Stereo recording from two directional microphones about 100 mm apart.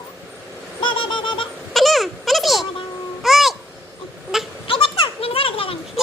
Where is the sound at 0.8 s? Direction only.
55° left (ahead or behind).